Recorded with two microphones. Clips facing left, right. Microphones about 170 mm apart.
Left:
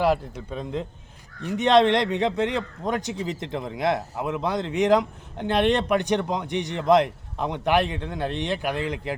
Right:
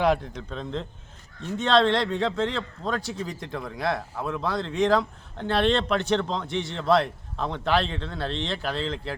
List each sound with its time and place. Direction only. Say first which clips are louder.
0.0 s a man's voice: left 1 dB; 5° left (ahead or behind)